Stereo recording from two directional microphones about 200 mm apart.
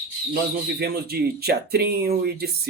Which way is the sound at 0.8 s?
50° right (ahead or behind).